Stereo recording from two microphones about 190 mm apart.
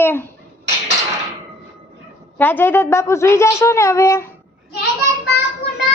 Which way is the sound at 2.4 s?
10° left (ahead or behind).